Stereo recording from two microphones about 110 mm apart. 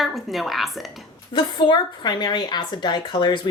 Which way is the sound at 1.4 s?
45° left (ahead or behind).